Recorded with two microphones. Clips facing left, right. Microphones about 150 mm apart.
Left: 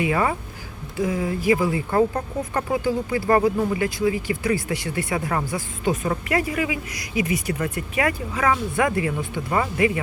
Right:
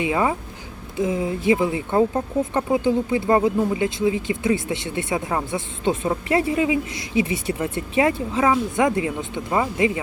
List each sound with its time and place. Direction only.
0.0 s speech: 15° right (ahead or behind)